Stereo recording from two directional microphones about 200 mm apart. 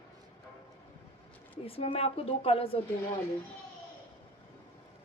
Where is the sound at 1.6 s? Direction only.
30° left (ahead or behind).